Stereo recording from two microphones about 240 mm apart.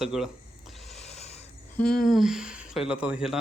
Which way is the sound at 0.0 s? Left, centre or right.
Centre.